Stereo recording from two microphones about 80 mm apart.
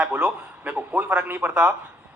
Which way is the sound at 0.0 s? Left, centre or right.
Centre.